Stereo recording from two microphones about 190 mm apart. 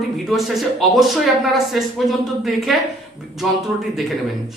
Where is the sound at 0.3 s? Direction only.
Centre (ahead or behind).